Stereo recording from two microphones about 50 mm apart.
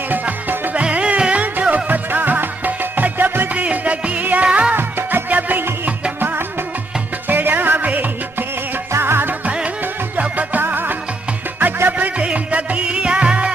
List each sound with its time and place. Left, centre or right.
0.1 s music: right
0.8 s music: right
3.6 s music: right
8.9 s music: right
10.1 s music: right
12.2 s music: right